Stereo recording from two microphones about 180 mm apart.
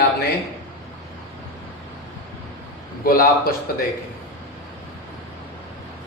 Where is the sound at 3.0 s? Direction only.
55° left (ahead or behind).